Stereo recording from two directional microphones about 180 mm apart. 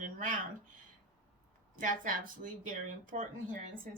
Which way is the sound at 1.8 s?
45° right (ahead or behind).